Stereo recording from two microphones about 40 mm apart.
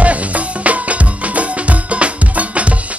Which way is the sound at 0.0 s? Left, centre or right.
Right.